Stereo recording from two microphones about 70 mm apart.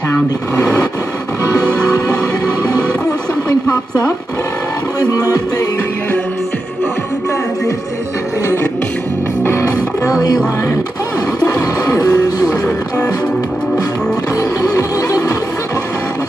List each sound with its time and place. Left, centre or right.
5.1 s music: left
9.4 s music: left
11.3 s music: left
14.6 s music: left